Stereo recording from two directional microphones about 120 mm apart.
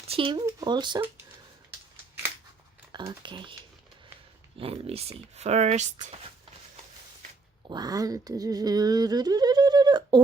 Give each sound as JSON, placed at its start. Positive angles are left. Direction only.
{"t": 0.1, "sound": "speech", "side_deg": -45}
{"t": 0.4, "sound": "speech", "side_deg": -35}
{"t": 3.0, "sound": "speech", "side_deg": -40}
{"t": 4.5, "sound": "speech", "side_deg": -55}
{"t": 7.7, "sound": "speech", "side_deg": -35}